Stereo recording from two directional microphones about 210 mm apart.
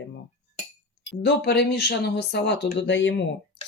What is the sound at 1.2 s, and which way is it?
Speech, 55° left (ahead or behind).